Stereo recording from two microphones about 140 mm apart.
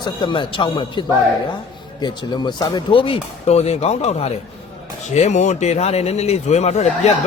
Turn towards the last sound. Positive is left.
turn(degrees=55)  # may be behind; listen again after turning